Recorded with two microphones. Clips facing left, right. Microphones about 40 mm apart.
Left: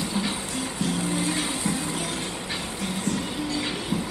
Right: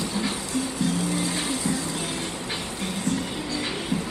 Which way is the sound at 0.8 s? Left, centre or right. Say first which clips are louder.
Right 1 dB; left.